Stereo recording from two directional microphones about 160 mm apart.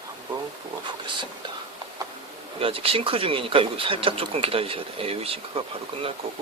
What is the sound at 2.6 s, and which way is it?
Speech, 35° right (ahead or behind).